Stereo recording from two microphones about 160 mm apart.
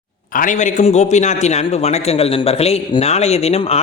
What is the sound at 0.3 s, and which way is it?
A man's voice, 55° left (ahead or behind).